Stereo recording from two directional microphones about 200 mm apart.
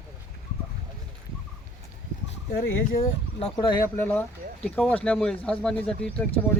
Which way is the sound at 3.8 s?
10° left (ahead or behind).